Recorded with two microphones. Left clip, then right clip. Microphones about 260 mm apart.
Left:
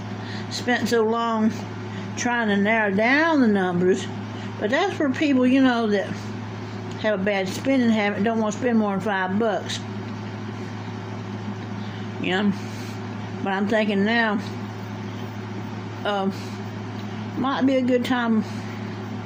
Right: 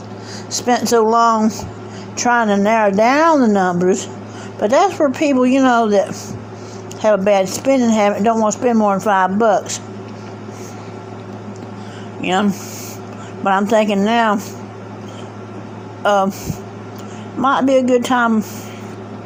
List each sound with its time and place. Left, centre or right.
0.9 s speech: right
12.2 s speech: centre
17.4 s speech: right